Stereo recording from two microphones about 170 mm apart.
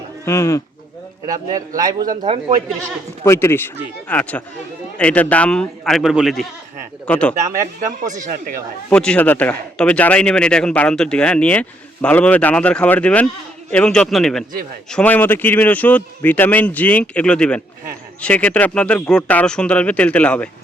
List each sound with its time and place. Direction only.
0.3 s speech: 15° left (ahead or behind)
1.3 s a man's voice: 20° right (ahead or behind)
3.2 s speech: 15° left (ahead or behind)
8.1 s speech: 45° right (ahead or behind)
8.9 s speech: 5° left (ahead or behind)